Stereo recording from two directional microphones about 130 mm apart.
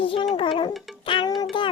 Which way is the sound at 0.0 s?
40° left (ahead or behind).